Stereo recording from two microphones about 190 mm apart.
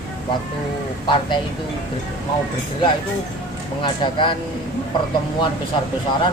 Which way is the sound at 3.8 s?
25° left (ahead or behind).